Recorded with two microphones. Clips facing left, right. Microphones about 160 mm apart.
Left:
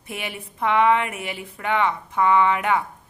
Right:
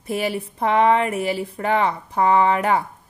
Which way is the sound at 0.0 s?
35° right (ahead or behind).